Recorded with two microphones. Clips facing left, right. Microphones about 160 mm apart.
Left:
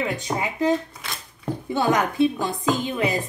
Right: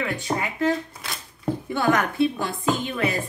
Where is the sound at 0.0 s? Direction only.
20° left (ahead or behind).